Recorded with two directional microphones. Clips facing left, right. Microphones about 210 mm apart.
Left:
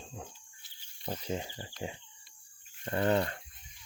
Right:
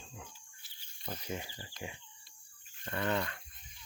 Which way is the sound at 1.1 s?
25° left (ahead or behind).